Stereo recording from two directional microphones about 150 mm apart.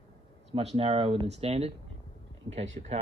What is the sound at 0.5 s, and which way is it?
Speech, 40° right (ahead or behind).